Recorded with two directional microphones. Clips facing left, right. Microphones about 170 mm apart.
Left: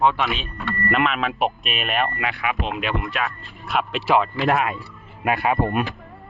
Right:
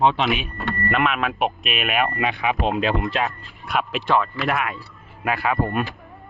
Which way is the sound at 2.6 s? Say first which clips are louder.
Right 4 dB; 35° right (ahead or behind).